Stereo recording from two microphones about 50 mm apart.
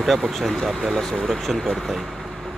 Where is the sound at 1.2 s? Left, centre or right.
Centre.